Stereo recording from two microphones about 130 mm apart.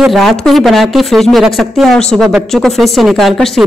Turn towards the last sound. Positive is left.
turn(degrees=0)  # may be behind; listen again after turning